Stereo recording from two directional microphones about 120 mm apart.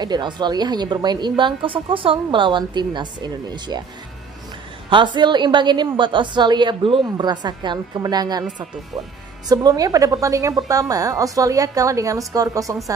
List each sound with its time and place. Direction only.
0.0 s a woman's voice: 35° right (ahead or behind)
4.8 s a woman's voice: 40° right (ahead or behind)
9.5 s a woman's voice: 35° right (ahead or behind)